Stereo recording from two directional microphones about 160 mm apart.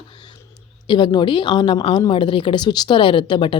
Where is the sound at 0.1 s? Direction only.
30° left (ahead or behind).